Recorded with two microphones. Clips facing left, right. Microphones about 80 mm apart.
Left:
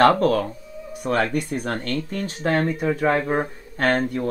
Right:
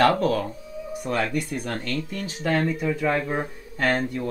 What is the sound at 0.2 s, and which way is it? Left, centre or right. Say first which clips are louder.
Speech: left 3 dB; left.